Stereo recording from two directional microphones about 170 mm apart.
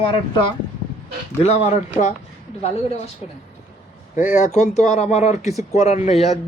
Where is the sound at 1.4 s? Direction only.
40° left (ahead or behind).